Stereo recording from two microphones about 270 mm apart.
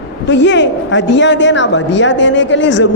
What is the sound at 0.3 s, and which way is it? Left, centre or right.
A woman's voice, left.